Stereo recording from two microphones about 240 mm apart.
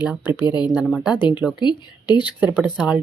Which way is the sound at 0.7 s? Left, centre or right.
Centre.